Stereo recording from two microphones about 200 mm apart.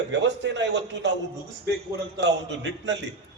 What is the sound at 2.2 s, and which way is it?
Speech, 60° right (ahead or behind).